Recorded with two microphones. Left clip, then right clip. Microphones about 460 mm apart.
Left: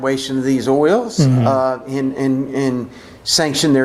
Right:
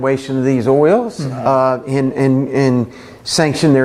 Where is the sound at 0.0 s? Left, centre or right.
Right.